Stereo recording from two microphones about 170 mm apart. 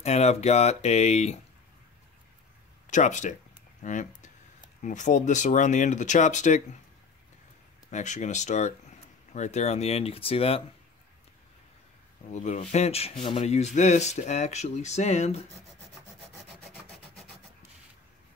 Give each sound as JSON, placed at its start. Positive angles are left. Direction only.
{"t": 0.0, "sound": "speech", "side_deg": 40}
{"t": 2.9, "sound": "speech", "side_deg": 45}
{"t": 7.9, "sound": "speech", "side_deg": 45}
{"t": 12.3, "sound": "speech", "side_deg": 45}